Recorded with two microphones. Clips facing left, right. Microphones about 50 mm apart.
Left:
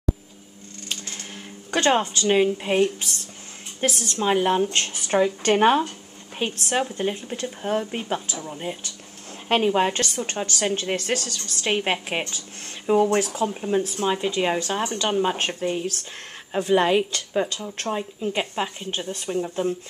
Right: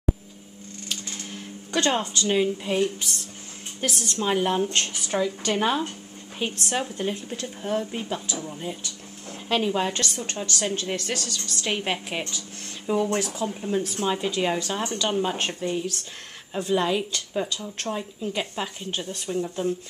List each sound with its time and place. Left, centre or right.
0.8 s a sound: left
3.8 s speech: centre
5.0 s speech: left
6.3 s a woman's voice: centre
16.5 s a woman's voice: left
17.6 s a woman's voice: centre